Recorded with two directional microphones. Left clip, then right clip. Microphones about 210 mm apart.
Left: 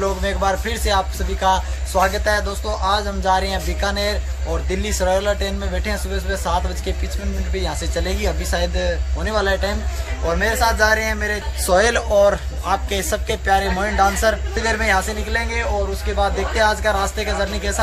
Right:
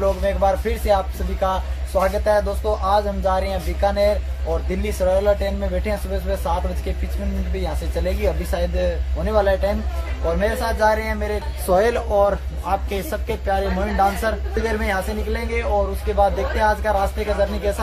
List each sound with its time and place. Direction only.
0.2 s a man's voice: 5° right (ahead or behind)
7.5 s a man's voice: 5° right (ahead or behind)